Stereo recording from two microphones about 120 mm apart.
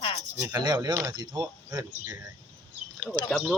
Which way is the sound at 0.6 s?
35° right (ahead or behind).